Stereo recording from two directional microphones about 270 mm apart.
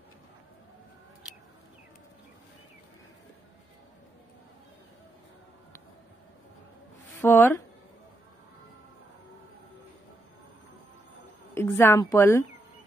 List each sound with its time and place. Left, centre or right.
7.2 s speech: centre
11.5 s speech: centre